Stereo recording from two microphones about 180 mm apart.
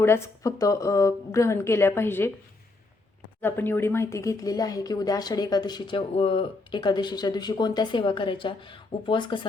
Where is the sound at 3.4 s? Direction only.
10° left (ahead or behind).